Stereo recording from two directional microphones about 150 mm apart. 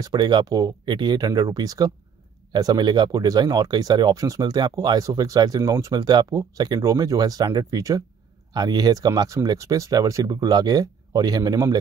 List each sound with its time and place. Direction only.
0.0 s speech: 30° right (ahead or behind)